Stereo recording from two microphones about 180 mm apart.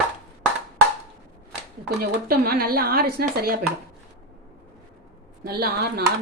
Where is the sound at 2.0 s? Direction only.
55° right (ahead or behind).